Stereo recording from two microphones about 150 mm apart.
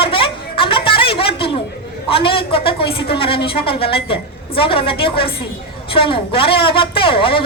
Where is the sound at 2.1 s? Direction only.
35° left (ahead or behind).